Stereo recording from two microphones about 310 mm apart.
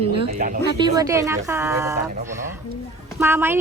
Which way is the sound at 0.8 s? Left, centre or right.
Centre.